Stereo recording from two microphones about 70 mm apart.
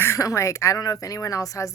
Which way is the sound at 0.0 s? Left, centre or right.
Left.